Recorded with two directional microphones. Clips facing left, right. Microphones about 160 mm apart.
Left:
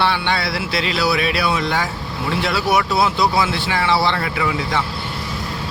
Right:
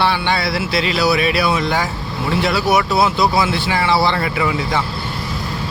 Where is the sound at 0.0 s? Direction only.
5° right (ahead or behind).